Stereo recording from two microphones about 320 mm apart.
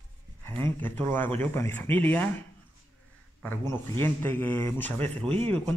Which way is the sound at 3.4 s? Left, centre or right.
Centre.